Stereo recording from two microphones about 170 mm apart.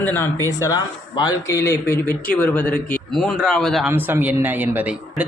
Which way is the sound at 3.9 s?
10° right (ahead or behind).